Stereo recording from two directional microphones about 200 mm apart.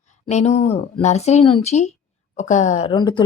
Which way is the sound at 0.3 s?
35° left (ahead or behind).